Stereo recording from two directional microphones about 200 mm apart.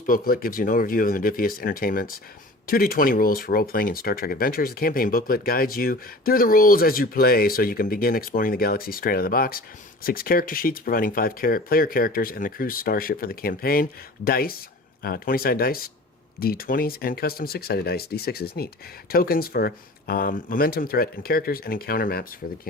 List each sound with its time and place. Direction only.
0.0 s speech: 45° left (ahead or behind)